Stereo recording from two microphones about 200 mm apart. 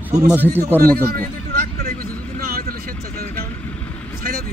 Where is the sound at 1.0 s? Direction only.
50° right (ahead or behind).